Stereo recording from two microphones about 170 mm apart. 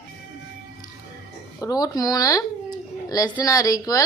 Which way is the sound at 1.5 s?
20° left (ahead or behind).